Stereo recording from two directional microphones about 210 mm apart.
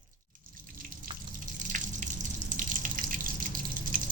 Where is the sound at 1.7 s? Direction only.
40° right (ahead or behind).